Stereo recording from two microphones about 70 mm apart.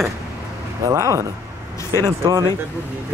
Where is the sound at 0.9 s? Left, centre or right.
Right.